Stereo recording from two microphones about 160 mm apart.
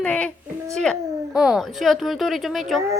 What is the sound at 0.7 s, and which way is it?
Speech, 5° left (ahead or behind).